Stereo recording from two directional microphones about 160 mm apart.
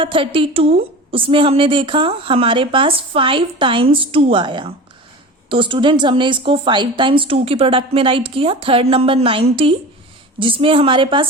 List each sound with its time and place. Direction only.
0.0 s a woman's voice: 30° right (ahead or behind)